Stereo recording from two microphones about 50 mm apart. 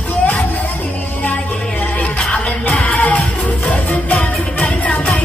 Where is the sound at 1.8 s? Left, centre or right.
Left.